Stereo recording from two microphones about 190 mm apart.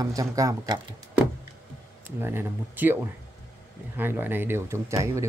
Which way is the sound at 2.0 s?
10° right (ahead or behind).